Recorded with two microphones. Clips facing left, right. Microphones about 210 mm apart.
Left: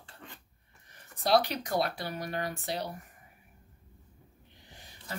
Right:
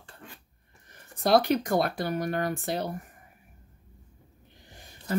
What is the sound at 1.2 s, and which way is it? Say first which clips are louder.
Speech: right 5 dB; 50° right (ahead or behind).